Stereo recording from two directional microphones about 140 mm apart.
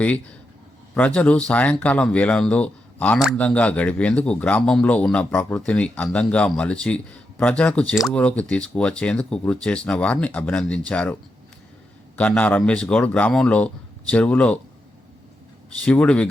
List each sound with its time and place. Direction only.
0.9 s speech: 10° left (ahead or behind)
15.8 s speech: 5° left (ahead or behind)